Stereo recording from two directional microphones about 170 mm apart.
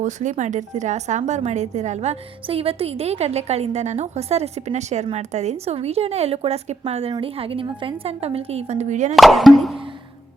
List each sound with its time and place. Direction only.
0.0 s speech: 45° right (ahead or behind)
9.1 s speech: centre (ahead or behind)